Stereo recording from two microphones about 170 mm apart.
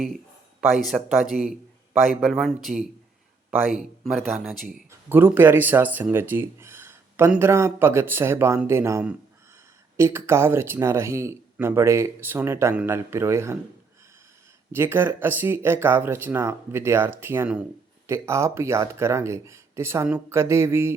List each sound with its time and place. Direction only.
0.7 s a man's voice: centre (ahead or behind)
4.9 s speech: 10° right (ahead or behind)
14.7 s speech: 15° right (ahead or behind)